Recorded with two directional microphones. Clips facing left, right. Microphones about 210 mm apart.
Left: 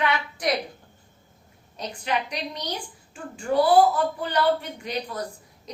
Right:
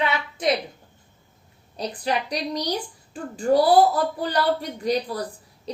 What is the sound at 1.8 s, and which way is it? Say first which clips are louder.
A woman's voice: right 2 dB; 35° right (ahead or behind).